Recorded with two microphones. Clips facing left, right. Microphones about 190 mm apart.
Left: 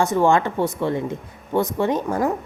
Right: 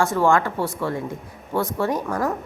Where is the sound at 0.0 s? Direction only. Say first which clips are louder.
Left 1 dB; 20° left (ahead or behind).